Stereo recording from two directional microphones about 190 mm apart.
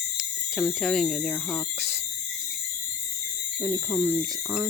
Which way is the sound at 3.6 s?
25° right (ahead or behind).